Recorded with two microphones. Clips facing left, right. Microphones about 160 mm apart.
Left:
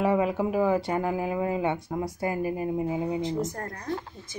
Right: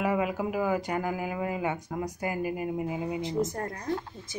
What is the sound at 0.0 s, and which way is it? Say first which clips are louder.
Speech: left 4 dB; 30° left (ahead or behind).